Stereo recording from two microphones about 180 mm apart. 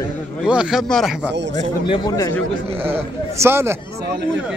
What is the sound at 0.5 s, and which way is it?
Speech, 5° right (ahead or behind).